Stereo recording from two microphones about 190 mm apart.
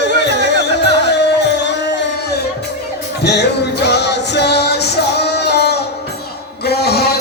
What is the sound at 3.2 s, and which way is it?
Music, 60° left (ahead or behind).